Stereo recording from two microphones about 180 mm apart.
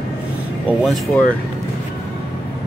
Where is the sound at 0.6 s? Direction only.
Centre (ahead or behind).